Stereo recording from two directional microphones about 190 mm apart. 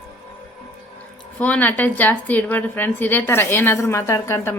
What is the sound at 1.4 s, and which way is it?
A woman's voice, 10° left (ahead or behind).